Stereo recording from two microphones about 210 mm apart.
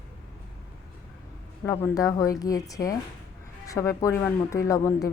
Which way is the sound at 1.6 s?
15° left (ahead or behind).